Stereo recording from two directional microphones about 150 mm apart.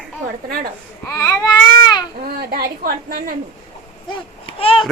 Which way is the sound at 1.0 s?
15° left (ahead or behind).